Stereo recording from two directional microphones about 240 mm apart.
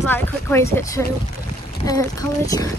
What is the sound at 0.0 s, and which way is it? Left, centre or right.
Speech, centre.